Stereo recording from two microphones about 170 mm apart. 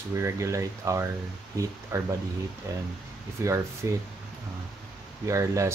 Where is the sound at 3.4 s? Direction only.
15° right (ahead or behind).